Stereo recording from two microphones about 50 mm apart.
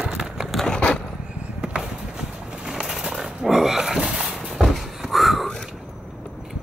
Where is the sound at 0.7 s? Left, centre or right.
Left.